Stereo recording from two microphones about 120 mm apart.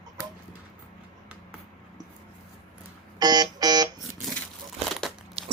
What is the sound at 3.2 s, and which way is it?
Buzzer, 35° right (ahead or behind).